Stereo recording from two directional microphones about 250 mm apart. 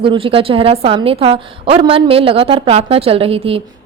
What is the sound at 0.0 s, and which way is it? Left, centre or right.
A woman's voice, right.